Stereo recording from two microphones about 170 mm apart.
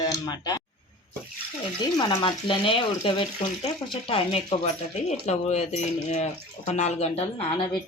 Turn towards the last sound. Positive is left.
turn(degrees=35)  # may be behind; listen again after turning